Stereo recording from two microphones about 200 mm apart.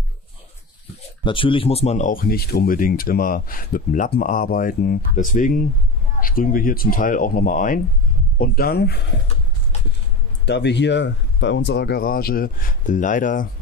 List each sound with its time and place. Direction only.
1.2 s speech: 25° left (ahead or behind); by 9.0 s 55° left (ahead or behind)
10.4 s speech: 60° left (ahead or behind); by 13.5 s 40° left (ahead or behind)